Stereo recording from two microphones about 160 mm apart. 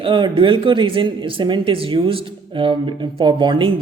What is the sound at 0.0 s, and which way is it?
Speech, 30° right (ahead or behind).